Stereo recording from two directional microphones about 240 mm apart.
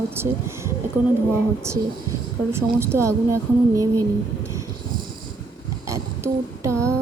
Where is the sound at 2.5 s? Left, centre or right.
Centre.